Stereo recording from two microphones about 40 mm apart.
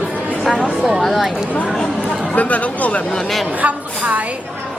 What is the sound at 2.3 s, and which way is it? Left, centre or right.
Speech, left.